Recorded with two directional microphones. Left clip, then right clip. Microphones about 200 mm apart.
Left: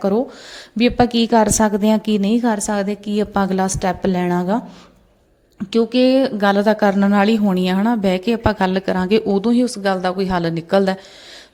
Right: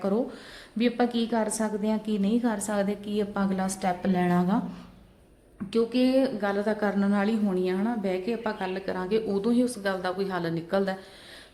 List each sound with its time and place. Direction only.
0.8 s speech: 40° left (ahead or behind)
5.7 s speech: 45° left (ahead or behind)